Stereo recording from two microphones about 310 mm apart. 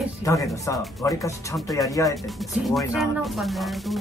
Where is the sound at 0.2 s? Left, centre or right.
Centre.